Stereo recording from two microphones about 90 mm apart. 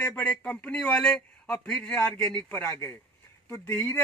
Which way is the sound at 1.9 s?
20° left (ahead or behind).